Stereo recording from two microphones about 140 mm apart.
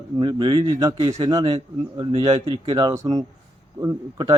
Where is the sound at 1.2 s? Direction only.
40° right (ahead or behind).